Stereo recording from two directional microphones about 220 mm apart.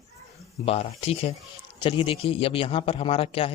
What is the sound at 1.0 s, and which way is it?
A man's voice, 25° left (ahead or behind).